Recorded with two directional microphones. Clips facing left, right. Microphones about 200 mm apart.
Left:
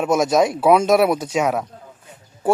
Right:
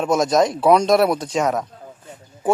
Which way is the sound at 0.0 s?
5° left (ahead or behind).